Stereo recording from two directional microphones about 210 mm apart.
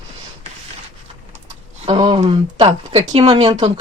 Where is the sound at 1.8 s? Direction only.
25° right (ahead or behind).